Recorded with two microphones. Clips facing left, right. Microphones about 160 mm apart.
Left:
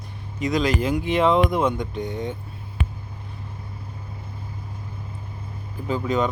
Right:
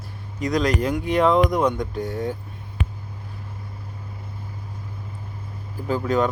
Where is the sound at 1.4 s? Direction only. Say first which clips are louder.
Right 1 dB; 5° left (ahead or behind).